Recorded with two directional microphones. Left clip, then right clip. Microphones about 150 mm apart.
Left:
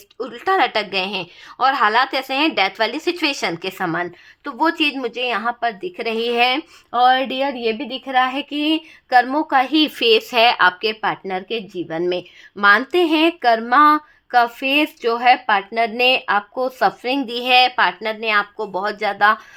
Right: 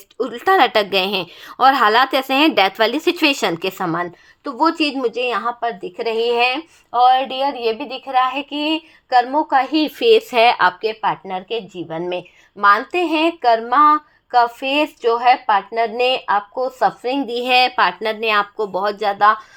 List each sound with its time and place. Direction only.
0.2 s a woman's voice: 20° right (ahead or behind)
3.8 s a woman's voice: 10° right (ahead or behind); by 6.6 s 15° left (ahead or behind)
6.9 s a woman's voice: 30° left (ahead or behind); by 10.8 s centre (ahead or behind)
10.8 s a woman's voice: 15° left (ahead or behind); by 19.1 s 5° right (ahead or behind)